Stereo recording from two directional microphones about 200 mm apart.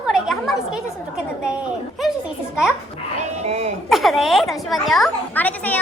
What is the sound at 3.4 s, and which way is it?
Speech, 30° right (ahead or behind).